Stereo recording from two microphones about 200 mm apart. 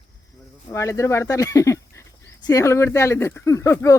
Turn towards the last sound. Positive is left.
turn(degrees=15)  # may be behind; listen again after turning